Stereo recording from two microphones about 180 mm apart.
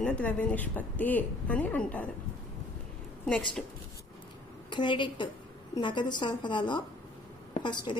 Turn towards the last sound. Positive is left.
turn(degrees=25)  # may be behind; listen again after turning